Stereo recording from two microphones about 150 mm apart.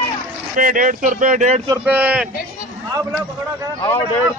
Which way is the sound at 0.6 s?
60° right (ahead or behind).